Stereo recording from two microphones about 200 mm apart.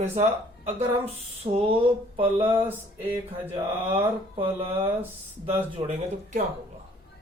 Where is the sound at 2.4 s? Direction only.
10° right (ahead or behind).